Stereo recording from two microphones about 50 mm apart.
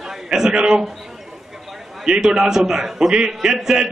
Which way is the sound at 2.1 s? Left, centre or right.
Centre.